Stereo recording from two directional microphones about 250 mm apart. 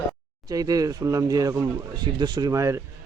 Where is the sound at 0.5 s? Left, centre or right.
Centre.